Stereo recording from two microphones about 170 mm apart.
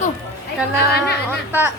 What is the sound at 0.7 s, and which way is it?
Speech, 70° left (ahead or behind).